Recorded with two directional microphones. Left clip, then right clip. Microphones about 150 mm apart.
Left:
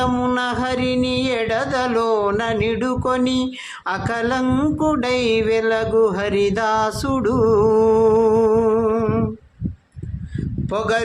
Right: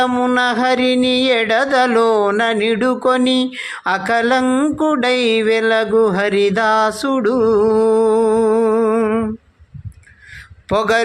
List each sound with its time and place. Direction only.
0.0 s music: 25° right (ahead or behind)
10.7 s speech: 40° right (ahead or behind)